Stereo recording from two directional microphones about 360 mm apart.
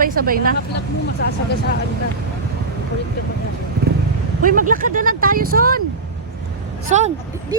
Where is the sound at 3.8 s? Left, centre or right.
Right.